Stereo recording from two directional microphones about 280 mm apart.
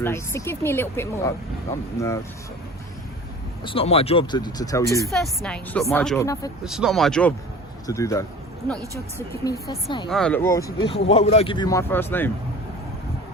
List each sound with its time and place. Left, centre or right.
0.0 s speech: centre
3.6 s speech: centre
5.0 s speech: centre
6.7 s speech: centre
9.3 s speech: centre
10.1 s speech: centre